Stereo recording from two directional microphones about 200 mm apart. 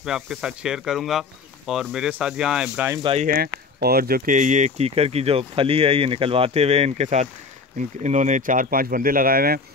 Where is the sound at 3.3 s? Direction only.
50° right (ahead or behind).